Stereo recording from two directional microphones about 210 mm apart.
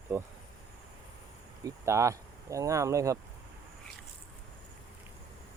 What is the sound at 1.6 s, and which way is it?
Speech, 15° right (ahead or behind).